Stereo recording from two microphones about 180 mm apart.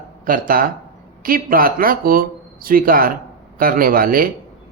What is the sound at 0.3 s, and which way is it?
Speech, 50° right (ahead or behind).